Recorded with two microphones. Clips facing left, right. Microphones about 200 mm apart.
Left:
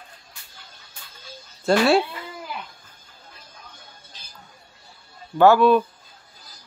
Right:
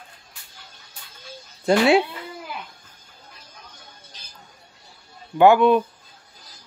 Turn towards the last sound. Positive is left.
turn(degrees=-20)  # may be behind; listen again after turning